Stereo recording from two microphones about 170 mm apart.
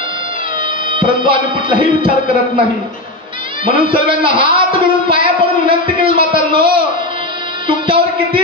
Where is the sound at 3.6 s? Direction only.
30° right (ahead or behind).